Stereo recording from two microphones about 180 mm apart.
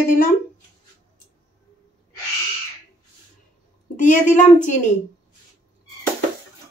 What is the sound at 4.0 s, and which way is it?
Speech, 45° left (ahead or behind).